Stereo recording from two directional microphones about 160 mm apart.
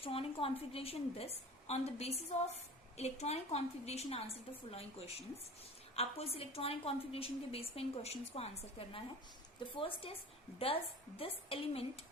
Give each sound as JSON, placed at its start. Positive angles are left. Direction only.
{"t": 0.0, "sound": "a woman's voice", "side_deg": 35}
{"t": 11.2, "sound": "a woman's voice", "side_deg": 35}